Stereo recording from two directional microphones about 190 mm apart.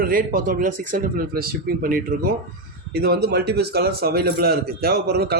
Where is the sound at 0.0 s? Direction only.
50° right (ahead or behind).